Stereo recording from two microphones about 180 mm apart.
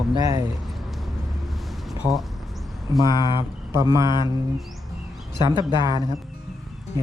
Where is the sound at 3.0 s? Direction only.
25° left (ahead or behind).